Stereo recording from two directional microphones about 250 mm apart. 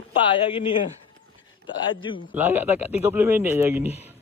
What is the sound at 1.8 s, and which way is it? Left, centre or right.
Speech, centre.